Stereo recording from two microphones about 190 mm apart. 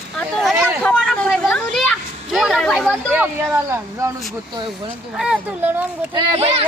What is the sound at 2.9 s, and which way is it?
A woman's voice, 10° right (ahead or behind).